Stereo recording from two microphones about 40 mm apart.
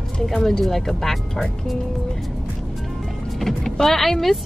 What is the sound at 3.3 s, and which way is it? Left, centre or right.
Vehicle, centre.